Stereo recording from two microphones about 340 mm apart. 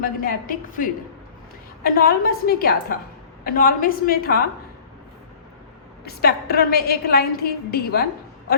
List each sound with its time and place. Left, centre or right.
0.0 s a woman's voice: left
6.1 s a woman's voice: left